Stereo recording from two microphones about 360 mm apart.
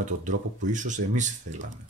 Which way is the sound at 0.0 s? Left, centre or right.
Right.